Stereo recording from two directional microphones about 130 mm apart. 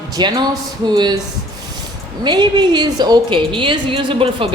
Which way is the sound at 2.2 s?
35° right (ahead or behind).